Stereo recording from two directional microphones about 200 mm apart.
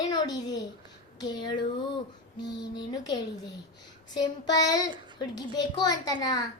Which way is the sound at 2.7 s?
20° left (ahead or behind).